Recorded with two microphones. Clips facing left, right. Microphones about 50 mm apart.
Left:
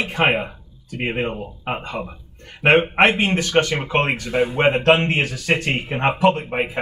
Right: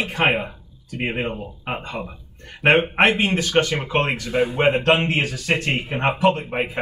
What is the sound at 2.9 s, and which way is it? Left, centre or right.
Speech, left.